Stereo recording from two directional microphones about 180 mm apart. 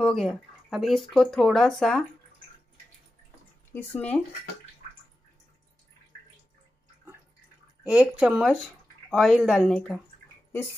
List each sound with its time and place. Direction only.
0.0 s speech: centre (ahead or behind)
3.7 s speech: 10° left (ahead or behind)
7.8 s speech: 5° right (ahead or behind)